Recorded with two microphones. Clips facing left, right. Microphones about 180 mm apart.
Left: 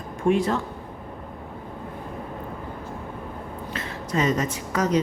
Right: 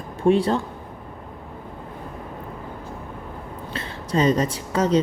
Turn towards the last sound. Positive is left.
turn(degrees=-30)  # may be behind; listen again after turning